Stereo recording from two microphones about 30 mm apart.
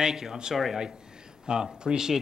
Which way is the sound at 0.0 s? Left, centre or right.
Centre.